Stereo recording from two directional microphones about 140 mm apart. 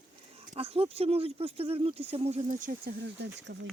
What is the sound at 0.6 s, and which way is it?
Speech, 45° right (ahead or behind).